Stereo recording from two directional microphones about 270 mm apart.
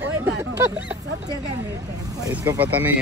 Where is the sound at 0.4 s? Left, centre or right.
Centre.